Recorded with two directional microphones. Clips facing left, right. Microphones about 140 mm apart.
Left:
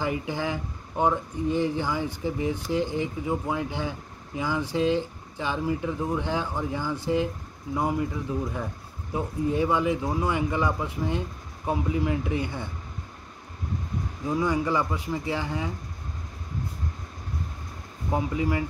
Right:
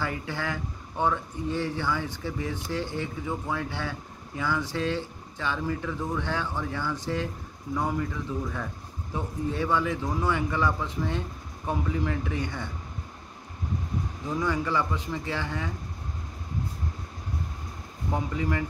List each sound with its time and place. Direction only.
0.0 s speech: 15° left (ahead or behind)
14.2 s speech: 15° left (ahead or behind)
18.1 s speech: 15° left (ahead or behind)